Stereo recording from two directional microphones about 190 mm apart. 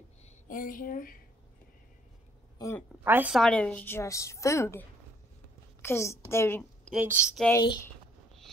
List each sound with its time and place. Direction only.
0.5 s speech: 45° left (ahead or behind)
3.0 s a woman's voice: 10° right (ahead or behind)
3.3 s a woman's voice: 5° left (ahead or behind)
6.9 s speech: 5° right (ahead or behind)
7.6 s speech: 25° left (ahead or behind)